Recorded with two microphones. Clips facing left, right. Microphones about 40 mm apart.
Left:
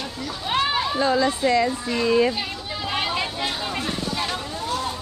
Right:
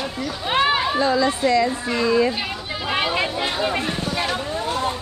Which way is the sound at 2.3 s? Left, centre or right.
Centre.